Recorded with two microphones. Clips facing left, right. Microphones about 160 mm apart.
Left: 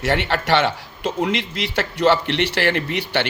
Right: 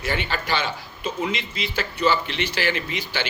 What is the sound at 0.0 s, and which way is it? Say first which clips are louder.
A man's voice: left 6 dB; 75° left (ahead or behind).